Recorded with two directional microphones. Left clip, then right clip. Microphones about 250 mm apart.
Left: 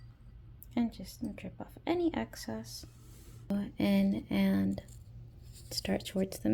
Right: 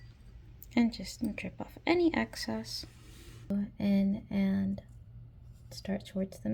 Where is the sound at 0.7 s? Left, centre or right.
Centre.